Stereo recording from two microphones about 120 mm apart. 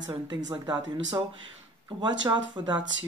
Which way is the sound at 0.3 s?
40° right (ahead or behind).